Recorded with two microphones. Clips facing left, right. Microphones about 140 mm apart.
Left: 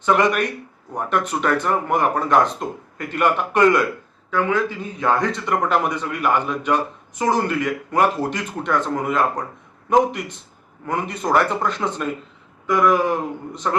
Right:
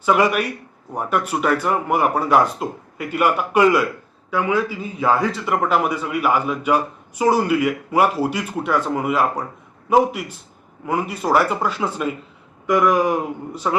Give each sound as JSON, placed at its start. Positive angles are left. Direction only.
{"t": 0.0, "sound": "speech", "side_deg": -5}